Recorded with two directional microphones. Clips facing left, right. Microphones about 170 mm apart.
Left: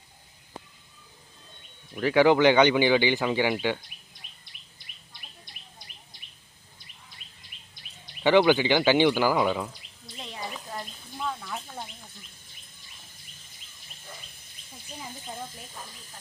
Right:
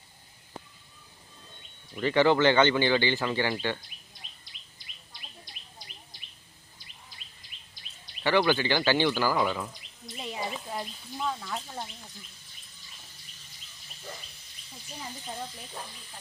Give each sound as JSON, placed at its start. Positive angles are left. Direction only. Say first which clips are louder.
{"t": 2.0, "sound": "speech", "louder": "left 3 dB", "side_deg": 10}
{"t": 8.2, "sound": "speech", "louder": "left 5 dB", "side_deg": 20}
{"t": 10.2, "sound": "bird", "louder": "right 3 dB", "side_deg": -5}